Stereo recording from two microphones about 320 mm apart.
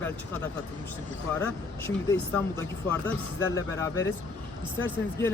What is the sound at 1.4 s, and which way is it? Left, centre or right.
Speech, centre.